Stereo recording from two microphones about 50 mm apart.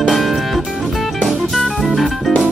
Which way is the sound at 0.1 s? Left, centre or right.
Centre.